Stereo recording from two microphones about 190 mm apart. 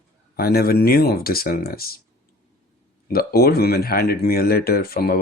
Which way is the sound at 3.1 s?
55° left (ahead or behind).